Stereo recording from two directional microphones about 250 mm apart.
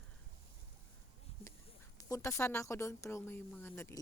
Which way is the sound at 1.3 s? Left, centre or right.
Left.